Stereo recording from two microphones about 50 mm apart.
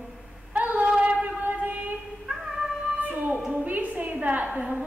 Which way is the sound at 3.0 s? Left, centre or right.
Right.